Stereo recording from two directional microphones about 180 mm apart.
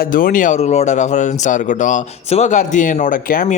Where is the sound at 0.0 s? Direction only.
50° left (ahead or behind).